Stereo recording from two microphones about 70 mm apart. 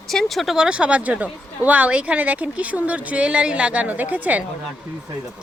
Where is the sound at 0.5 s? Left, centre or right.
Centre.